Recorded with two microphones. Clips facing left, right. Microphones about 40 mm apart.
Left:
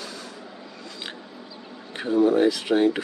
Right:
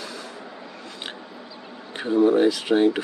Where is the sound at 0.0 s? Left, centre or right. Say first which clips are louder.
Right 2 dB; right.